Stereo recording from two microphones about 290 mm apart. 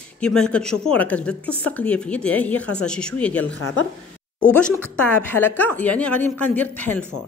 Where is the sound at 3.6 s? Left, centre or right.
Left.